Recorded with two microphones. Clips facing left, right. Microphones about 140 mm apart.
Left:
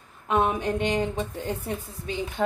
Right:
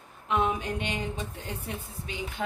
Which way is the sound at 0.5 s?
45° left (ahead or behind).